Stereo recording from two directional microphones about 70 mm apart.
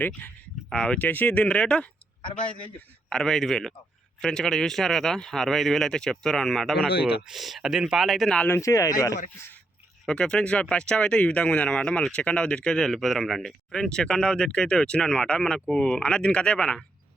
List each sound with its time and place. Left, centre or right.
0.7 s speech: centre
0.9 s speech: left
3.1 s speech: centre
6.8 s speech: centre
8.0 s speech: centre
8.6 s speech: left
10.1 s speech: centre